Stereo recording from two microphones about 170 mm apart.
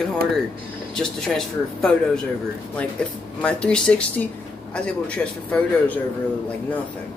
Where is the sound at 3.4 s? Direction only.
5° left (ahead or behind).